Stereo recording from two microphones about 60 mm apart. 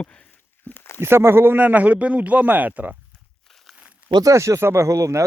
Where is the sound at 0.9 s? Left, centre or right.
Right.